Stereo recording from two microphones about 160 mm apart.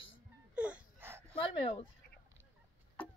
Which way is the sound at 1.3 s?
35° left (ahead or behind).